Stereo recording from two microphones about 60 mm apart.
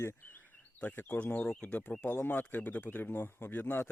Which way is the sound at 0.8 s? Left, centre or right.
Left.